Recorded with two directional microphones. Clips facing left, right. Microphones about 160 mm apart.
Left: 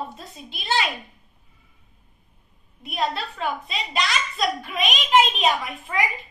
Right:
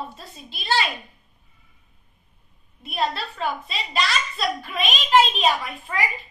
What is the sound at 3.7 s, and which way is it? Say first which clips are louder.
A woman's voice: even; 20° left (ahead or behind).